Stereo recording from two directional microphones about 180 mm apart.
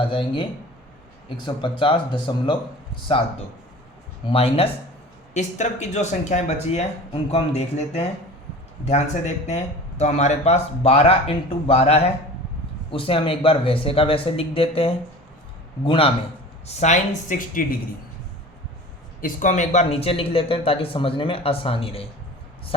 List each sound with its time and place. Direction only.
0.1 s speech: 25° left (ahead or behind)
1.5 s speech: 25° left (ahead or behind)
4.3 s speech: 35° left (ahead or behind); by 17.7 s 50° left (ahead or behind)
19.2 s speech: 45° left (ahead or behind)